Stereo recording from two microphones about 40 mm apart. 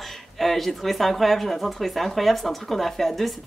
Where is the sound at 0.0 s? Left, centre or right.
Centre.